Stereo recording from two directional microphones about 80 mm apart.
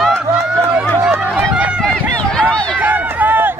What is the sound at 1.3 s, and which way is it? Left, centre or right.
Run, centre.